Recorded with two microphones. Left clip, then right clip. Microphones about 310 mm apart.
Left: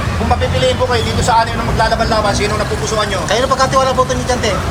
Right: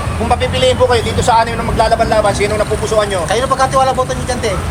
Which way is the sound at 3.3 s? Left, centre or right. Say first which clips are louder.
Left 2 dB; centre.